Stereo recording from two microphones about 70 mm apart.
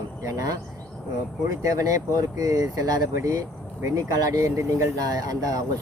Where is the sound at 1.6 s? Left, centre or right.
Right.